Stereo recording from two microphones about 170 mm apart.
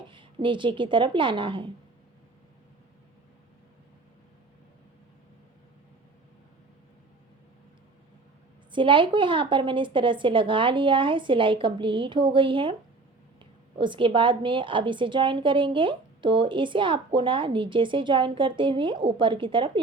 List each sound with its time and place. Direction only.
0.1 s a woman's voice: 30° right (ahead or behind)
8.7 s a woman's voice: 30° right (ahead or behind)